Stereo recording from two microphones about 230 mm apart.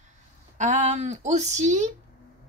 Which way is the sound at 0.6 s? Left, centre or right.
Right.